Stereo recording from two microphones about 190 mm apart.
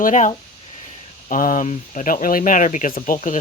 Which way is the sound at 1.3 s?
45° left (ahead or behind).